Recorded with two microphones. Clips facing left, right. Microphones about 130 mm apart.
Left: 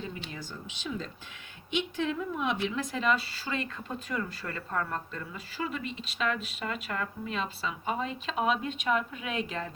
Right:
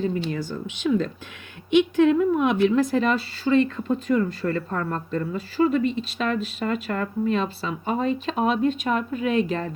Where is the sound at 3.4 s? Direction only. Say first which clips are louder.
Right 15 dB; 35° right (ahead or behind).